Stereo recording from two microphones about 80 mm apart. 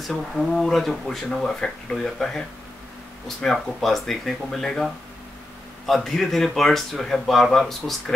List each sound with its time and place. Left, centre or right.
0.0 s speech: centre